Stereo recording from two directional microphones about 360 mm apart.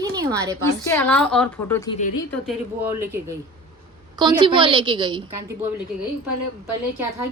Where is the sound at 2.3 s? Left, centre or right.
Centre.